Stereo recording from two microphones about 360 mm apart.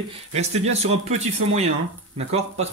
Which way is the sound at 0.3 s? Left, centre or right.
Centre.